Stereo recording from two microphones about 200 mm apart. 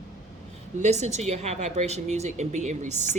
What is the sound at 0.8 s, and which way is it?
Speech, 35° right (ahead or behind).